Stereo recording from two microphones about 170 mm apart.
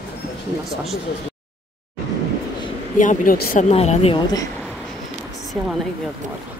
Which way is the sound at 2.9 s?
50° left (ahead or behind).